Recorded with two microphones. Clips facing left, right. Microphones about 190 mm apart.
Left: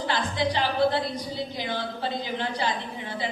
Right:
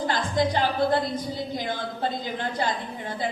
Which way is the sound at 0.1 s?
45° right (ahead or behind).